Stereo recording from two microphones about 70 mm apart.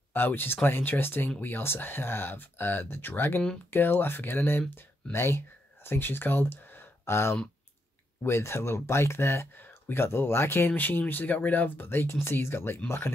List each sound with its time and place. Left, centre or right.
0.1 s speech: left